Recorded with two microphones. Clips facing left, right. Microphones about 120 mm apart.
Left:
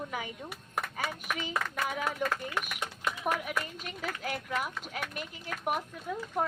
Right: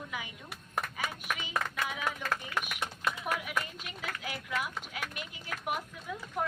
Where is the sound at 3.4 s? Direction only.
45° left (ahead or behind).